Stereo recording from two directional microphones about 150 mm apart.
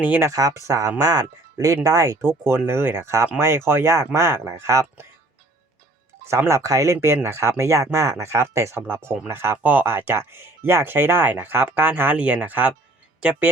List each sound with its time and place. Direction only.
0.0 s speech: 10° right (ahead or behind)
0.3 s speech: 20° right (ahead or behind)
6.2 s speech: 20° right (ahead or behind)